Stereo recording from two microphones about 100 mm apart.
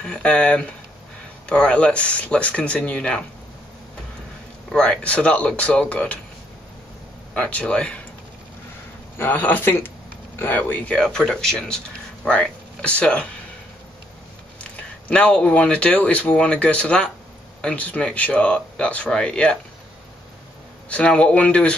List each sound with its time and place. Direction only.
0.0 s speech: 10° left (ahead or behind)
4.7 s speech: 10° left (ahead or behind)
7.3 s speech: 10° left (ahead or behind)
9.2 s speech: 15° left (ahead or behind)
11.0 s speech: 5° left (ahead or behind)
14.6 s speech: 10° left (ahead or behind)
20.9 s speech: 10° left (ahead or behind)